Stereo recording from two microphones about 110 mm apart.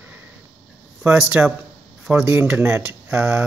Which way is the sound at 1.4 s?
15° right (ahead or behind).